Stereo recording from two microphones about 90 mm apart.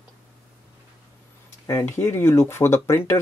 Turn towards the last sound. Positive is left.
turn(degrees=30)  # may be behind; listen again after turning